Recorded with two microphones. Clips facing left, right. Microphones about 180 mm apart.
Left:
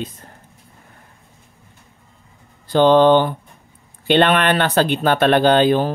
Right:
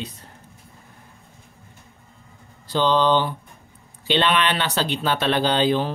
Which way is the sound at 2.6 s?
55° left (ahead or behind).